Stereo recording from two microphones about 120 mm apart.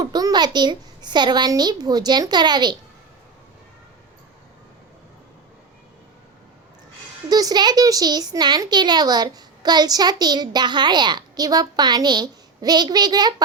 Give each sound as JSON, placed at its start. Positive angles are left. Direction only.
{"t": 0.0, "sound": "a child's voice", "side_deg": -30}
{"t": 7.3, "sound": "a child's voice", "side_deg": -30}